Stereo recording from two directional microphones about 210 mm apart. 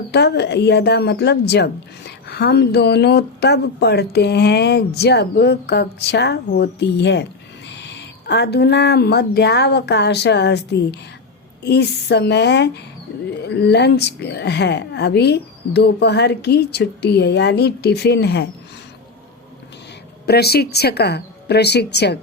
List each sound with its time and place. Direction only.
0.1 s speech: 50° left (ahead or behind)
20.2 s speech: 50° left (ahead or behind)